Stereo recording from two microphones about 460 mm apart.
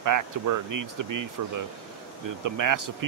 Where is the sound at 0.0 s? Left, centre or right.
Right.